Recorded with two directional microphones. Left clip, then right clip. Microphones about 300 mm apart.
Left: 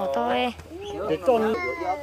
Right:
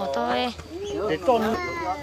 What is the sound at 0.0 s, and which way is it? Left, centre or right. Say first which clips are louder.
Bird: left 1 dB; centre.